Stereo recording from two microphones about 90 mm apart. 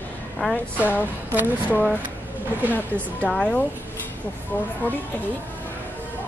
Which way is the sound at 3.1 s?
15° left (ahead or behind).